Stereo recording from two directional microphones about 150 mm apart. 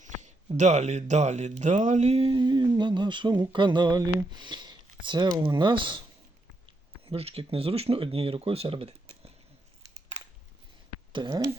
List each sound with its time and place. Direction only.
0.0 s speech: 55° right (ahead or behind); by 6.0 s 35° right (ahead or behind)
7.0 s speech: 40° right (ahead or behind)
11.1 s speech: 30° right (ahead or behind)